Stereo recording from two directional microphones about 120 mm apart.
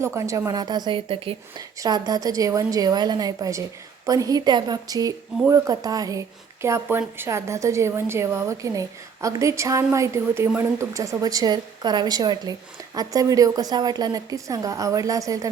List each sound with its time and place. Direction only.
0.0 s speech: 25° right (ahead or behind); by 1.4 s 50° right (ahead or behind)
1.5 s speech: 30° right (ahead or behind)